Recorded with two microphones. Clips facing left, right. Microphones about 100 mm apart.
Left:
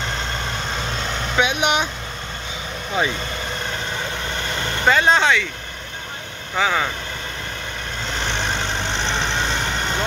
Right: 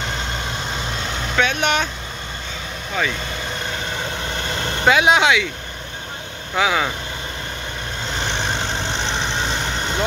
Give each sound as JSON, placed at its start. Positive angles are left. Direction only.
{"t": 1.3, "sound": "speech", "side_deg": 15}
{"t": 3.0, "sound": "speech", "side_deg": 20}
{"t": 4.5, "sound": "vehicle", "side_deg": -25}
{"t": 4.8, "sound": "speech", "side_deg": -10}
{"t": 6.5, "sound": "speech", "side_deg": -5}
{"t": 8.4, "sound": "vehicle", "side_deg": -20}